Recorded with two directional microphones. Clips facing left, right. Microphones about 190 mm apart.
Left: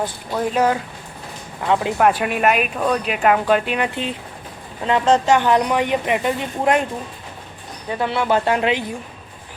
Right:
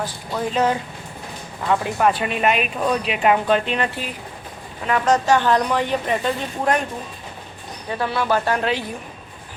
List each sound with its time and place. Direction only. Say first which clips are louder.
0.3 s a woman's voice: left 2 dB; 10° left (ahead or behind)
4.9 s a woman's voice: left 2 dB; 25° left (ahead or behind)
7.9 s speech: left 2 dB; 20° left (ahead or behind)